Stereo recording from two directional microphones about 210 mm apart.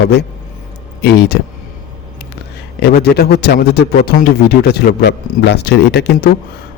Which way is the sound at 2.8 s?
50° left (ahead or behind).